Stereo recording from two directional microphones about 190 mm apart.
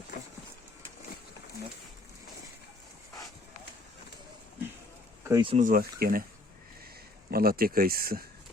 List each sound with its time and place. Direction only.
5.3 s speech: 25° right (ahead or behind)
5.5 s speech: 45° right (ahead or behind)
7.3 s speech: 50° right (ahead or behind)